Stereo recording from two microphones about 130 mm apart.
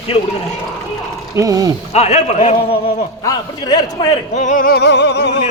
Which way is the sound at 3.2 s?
30° left (ahead or behind).